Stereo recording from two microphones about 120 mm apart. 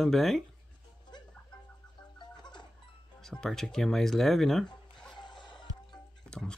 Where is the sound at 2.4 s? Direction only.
40° left (ahead or behind).